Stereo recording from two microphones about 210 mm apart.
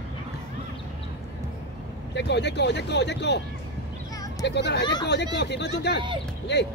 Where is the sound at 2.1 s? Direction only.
55° left (ahead or behind).